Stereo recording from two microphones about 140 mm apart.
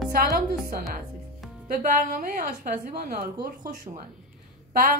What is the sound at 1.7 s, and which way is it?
A woman's voice, 80° right.